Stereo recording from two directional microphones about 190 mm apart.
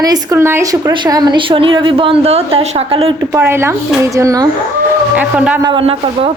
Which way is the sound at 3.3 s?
10° right (ahead or behind).